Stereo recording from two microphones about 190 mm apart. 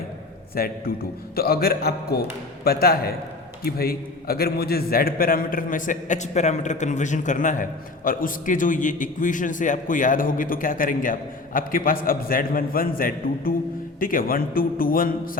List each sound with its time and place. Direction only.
0.5 s a man's voice: 50° left (ahead or behind)